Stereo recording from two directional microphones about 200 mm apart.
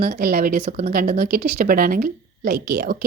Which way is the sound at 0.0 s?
50° right (ahead or behind).